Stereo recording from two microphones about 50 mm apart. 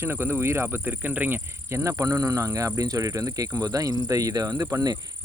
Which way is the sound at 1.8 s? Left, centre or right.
Right.